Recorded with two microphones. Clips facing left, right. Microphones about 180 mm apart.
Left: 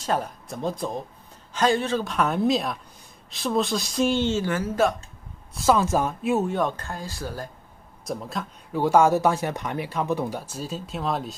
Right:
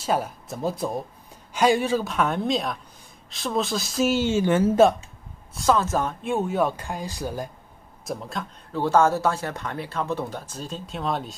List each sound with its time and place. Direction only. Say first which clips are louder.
0.0 s speech: right 1 dB; 5° right (ahead or behind); by 4.9 s 25° right (ahead or behind)
5.5 s speech: left 1 dB; 5° left (ahead or behind); by 7.5 s 15° right (ahead or behind)
8.0 s speech: left 1 dB; centre (ahead or behind)
8.7 s speech: left 1 dB; 10° left (ahead or behind)